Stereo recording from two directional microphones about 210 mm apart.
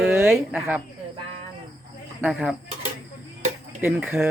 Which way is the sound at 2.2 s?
5° right (ahead or behind).